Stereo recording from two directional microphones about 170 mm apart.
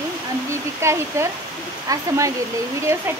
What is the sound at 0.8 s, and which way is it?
Speech, 15° right (ahead or behind).